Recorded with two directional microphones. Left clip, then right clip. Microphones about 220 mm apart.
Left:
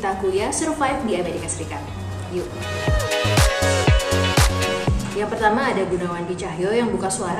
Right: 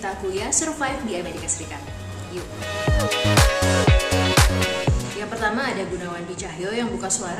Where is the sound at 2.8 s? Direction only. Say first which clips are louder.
Even; centre (ahead or behind).